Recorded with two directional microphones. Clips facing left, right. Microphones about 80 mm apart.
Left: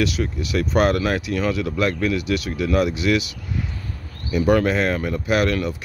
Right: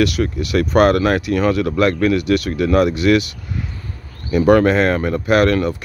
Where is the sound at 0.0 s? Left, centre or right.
Right.